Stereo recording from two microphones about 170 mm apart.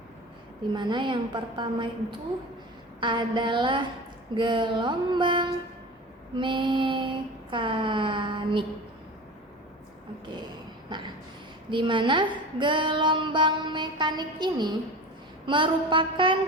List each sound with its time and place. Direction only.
0.7 s a woman's voice: 25° right (ahead or behind)
10.3 s a sound: 25° right (ahead or behind)
11.7 s a woman's voice: 30° right (ahead or behind)